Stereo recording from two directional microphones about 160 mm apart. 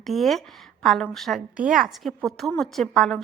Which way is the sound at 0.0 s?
Centre (ahead or behind).